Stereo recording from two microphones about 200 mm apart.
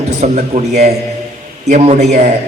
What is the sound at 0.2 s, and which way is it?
A man's voice, 35° right (ahead or behind).